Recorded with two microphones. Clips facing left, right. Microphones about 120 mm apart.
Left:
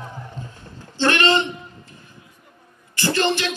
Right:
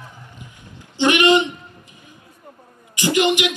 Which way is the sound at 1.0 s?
15° right (ahead or behind).